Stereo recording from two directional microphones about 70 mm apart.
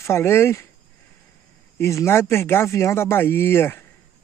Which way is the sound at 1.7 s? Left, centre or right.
Left.